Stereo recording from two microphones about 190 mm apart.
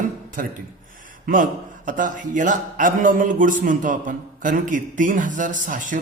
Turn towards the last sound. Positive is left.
turn(degrees=-45)  # may be behind; listen again after turning